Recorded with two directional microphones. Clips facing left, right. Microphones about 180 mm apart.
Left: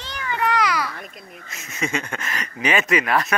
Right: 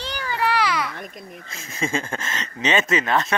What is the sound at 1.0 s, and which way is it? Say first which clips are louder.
Speech: right 3 dB; 45° right (ahead or behind).